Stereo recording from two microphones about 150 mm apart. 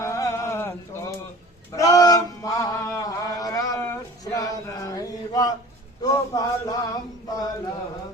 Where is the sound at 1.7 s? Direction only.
25° left (ahead or behind).